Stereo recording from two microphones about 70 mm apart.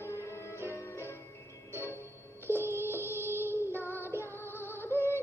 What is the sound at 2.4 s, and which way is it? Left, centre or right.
Music, left.